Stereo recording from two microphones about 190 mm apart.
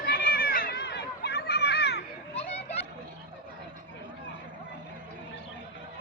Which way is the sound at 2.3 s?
35° left (ahead or behind).